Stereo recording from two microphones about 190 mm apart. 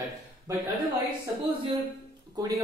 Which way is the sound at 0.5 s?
15° right (ahead or behind).